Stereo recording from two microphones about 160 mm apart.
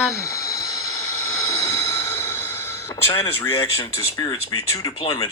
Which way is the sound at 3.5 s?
30° left (ahead or behind).